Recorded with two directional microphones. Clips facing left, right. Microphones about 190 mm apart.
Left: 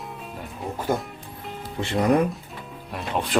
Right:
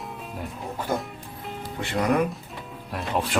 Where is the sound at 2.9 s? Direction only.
Centre (ahead or behind).